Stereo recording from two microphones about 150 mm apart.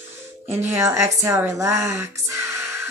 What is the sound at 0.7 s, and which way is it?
Speech, 20° right (ahead or behind).